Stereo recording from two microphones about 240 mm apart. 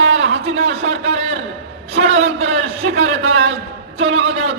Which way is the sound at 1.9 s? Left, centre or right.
Right.